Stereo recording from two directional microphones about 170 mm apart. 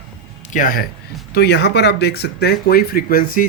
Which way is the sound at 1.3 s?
75° left (ahead or behind).